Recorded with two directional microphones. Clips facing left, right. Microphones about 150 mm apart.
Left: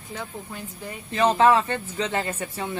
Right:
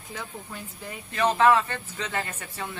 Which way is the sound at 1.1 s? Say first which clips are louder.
Left 2 dB; 30° left (ahead or behind).